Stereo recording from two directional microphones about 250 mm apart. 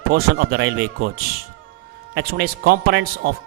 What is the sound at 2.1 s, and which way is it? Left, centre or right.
Speech, right.